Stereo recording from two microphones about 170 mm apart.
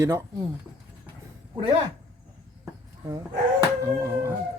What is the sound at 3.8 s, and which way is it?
Speech, 15° right (ahead or behind).